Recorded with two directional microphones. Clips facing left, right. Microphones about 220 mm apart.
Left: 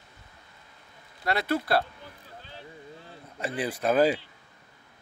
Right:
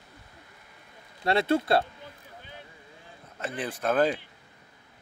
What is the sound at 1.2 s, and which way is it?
Speech, 25° right (ahead or behind).